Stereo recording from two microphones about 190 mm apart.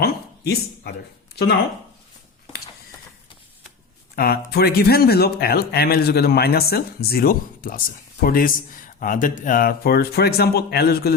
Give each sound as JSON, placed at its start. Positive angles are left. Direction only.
{"t": 0.0, "sound": "speech", "side_deg": 55}
{"t": 4.1, "sound": "speech", "side_deg": 55}